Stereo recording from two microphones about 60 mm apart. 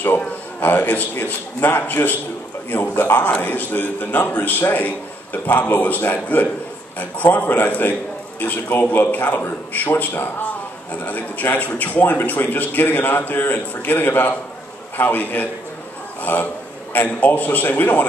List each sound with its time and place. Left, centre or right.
0.6 s a man's voice: left